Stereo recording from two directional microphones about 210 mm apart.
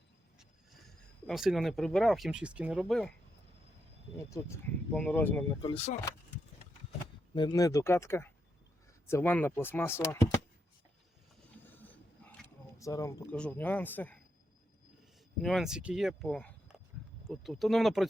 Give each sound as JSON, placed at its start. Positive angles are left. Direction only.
{"t": 1.3, "sound": "speech", "side_deg": 0}
{"t": 4.3, "sound": "speech", "side_deg": 15}
{"t": 5.6, "sound": "speech", "side_deg": 30}
{"t": 7.3, "sound": "speech", "side_deg": 20}
{"t": 11.6, "sound": "a sound", "side_deg": 10}
{"t": 13.3, "sound": "speech", "side_deg": 5}
{"t": 15.4, "sound": "speech", "side_deg": 0}